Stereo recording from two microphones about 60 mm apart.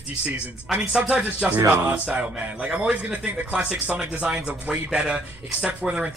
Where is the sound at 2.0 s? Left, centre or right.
Right.